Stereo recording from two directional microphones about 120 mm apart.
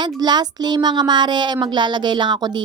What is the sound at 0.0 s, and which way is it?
Speech, 35° right (ahead or behind).